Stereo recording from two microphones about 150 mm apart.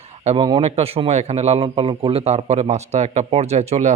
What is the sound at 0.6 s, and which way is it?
Speech, 40° right (ahead or behind).